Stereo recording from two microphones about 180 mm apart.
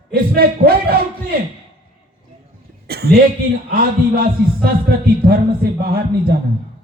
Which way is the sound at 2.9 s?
60° right (ahead or behind).